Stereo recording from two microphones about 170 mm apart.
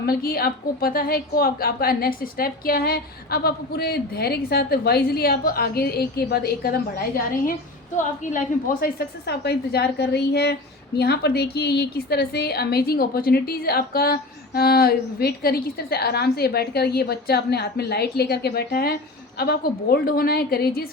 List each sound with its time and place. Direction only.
0.0 s a woman's voice: 60° left (ahead or behind)
8.8 s a woman's voice: 65° left (ahead or behind)